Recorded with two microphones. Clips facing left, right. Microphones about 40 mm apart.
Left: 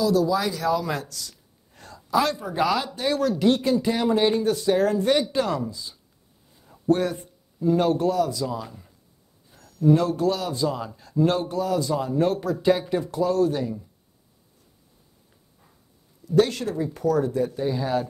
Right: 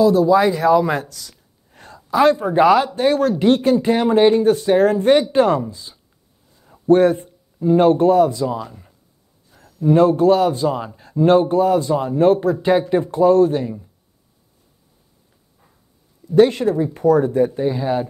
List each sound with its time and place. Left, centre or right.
0.0 s speech: right
6.6 s a sound: right
7.2 s speech: right
16.3 s speech: right